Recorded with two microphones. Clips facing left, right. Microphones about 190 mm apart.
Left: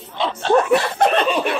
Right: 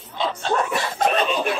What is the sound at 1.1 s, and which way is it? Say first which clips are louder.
Speech: left 3 dB; 65° left (ahead or behind).